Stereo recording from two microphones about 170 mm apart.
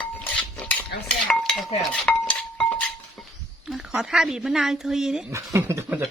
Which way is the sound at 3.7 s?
5° right (ahead or behind).